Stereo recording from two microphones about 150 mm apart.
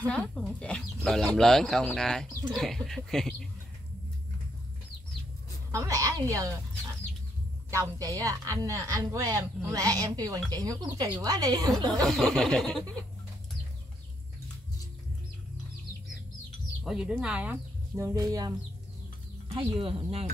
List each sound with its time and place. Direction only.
0.0 s speech: 10° left (ahead or behind)
5.7 s a woman's voice: 20° right (ahead or behind)
7.7 s a woman's voice: 20° right (ahead or behind)
12.1 s speech: centre (ahead or behind)
16.8 s speech: centre (ahead or behind); by 18.5 s 25° right (ahead or behind)
19.5 s speech: 35° right (ahead or behind)